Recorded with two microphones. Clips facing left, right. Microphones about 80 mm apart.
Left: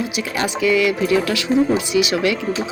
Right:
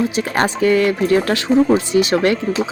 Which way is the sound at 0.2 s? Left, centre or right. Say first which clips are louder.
Right 1 dB; right.